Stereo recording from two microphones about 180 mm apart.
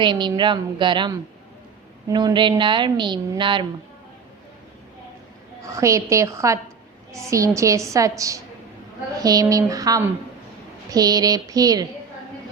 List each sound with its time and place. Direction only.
0.0 s a woman's voice: 25° right (ahead or behind)
5.6 s a woman's voice: 15° right (ahead or behind)